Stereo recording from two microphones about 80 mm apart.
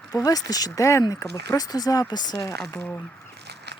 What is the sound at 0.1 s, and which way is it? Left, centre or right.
Speech, left.